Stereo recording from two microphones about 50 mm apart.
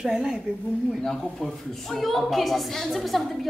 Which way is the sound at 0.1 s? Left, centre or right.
Centre.